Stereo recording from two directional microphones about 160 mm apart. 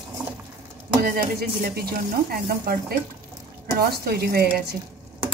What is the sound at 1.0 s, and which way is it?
Speech, 70° right (ahead or behind).